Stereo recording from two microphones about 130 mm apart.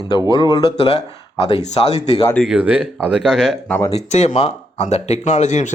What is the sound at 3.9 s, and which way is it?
Speech, 60° left (ahead or behind).